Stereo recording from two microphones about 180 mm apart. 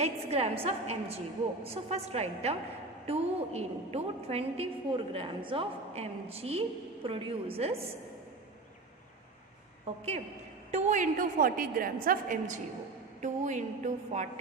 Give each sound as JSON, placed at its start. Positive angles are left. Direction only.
{"t": 0.0, "sound": "a woman's voice", "side_deg": -35}
{"t": 10.7, "sound": "a woman's voice", "side_deg": -40}